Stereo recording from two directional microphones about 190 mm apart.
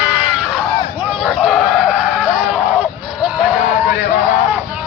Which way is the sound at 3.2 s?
5° right (ahead or behind).